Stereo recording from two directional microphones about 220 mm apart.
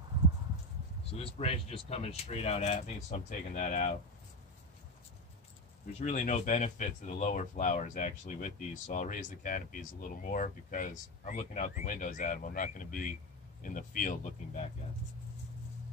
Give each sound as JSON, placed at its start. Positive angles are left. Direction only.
{"t": 1.1, "sound": "speech", "side_deg": 25}
{"t": 5.9, "sound": "speech", "side_deg": 30}